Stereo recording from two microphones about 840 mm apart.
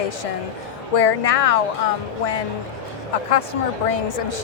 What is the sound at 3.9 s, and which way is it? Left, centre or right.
Speech, left.